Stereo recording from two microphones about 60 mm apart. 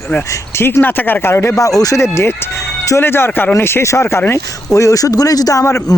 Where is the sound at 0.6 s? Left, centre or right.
Left.